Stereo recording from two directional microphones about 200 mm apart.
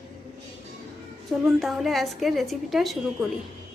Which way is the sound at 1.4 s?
Centre (ahead or behind).